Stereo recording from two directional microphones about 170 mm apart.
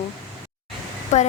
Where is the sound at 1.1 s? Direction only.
45° left (ahead or behind).